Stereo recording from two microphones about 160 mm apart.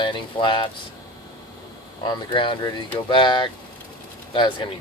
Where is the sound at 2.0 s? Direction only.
30° left (ahead or behind).